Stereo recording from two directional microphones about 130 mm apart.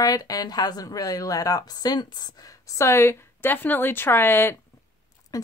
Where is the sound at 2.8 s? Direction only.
20° left (ahead or behind).